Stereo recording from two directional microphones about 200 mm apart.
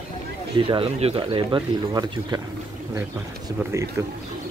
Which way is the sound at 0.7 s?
30° right (ahead or behind).